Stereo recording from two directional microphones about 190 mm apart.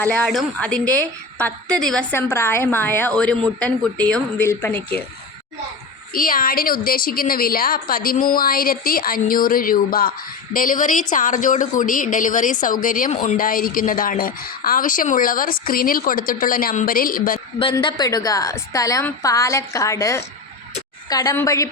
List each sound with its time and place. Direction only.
0.0 s a woman's voice: 5° left (ahead or behind)
6.1 s a woman's voice: 50° left (ahead or behind)
17.6 s a woman's voice: 25° left (ahead or behind)